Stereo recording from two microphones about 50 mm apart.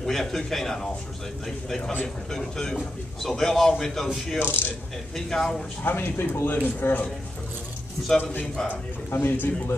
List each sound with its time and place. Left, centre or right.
0.0 s a man's voice: centre
1.8 s speech: left
2.3 s a man's voice: centre
4.4 s speech: left
5.1 s a man's voice: centre
5.9 s speech: left
8.2 s a man's voice: left